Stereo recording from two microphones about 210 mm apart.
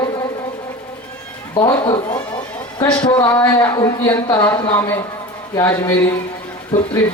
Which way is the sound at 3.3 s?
10° left (ahead or behind).